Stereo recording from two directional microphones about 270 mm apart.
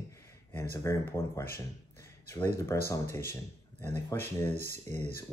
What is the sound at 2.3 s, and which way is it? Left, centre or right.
Mantra, centre.